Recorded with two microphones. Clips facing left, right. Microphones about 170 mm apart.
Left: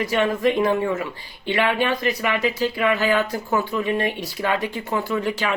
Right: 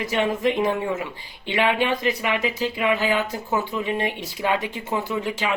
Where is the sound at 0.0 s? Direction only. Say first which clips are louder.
Left 2 dB; 20° right (ahead or behind).